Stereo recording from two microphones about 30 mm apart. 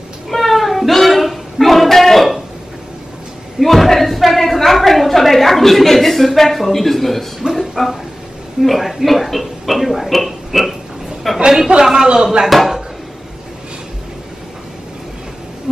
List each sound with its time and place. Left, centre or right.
0.3 s meow: centre
3.5 s a woman's voice: centre
7.5 s a sound: centre
8.6 s speech: centre
11.8 s a man's voice: centre
12.4 s speech: centre